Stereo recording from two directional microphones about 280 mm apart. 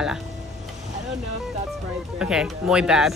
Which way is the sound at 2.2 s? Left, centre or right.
Centre.